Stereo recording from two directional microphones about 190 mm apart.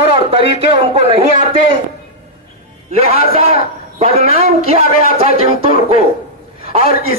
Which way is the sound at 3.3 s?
35° right (ahead or behind).